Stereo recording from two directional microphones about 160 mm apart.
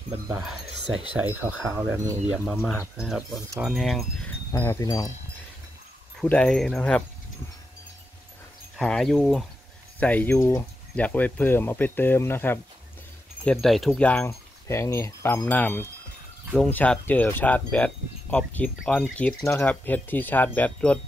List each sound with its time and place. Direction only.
1.3 s speech: 10° right (ahead or behind)
2.3 s wind chime: 5° right (ahead or behind)
4.5 s speech: 20° left (ahead or behind)
6.2 s speech: 5° left (ahead or behind)
8.7 s wind chime: centre (ahead or behind)
9.9 s speech: 10° left (ahead or behind)
14.2 s speech: 15° left (ahead or behind)